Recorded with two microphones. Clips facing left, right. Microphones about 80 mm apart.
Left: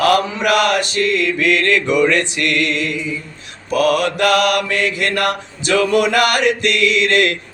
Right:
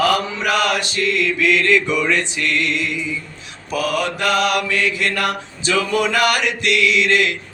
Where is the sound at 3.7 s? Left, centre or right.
Left.